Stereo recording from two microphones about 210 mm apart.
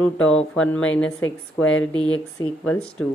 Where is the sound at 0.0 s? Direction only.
5° left (ahead or behind).